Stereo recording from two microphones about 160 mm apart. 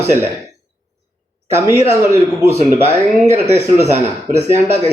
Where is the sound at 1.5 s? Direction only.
15° right (ahead or behind).